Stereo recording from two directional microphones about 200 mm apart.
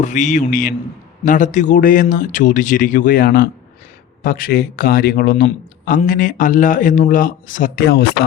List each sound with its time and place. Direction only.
0.0 s speech: 35° left (ahead or behind)
7.9 s speech: 55° left (ahead or behind)